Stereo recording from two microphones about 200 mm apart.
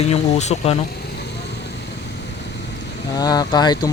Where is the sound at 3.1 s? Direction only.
20° left (ahead or behind).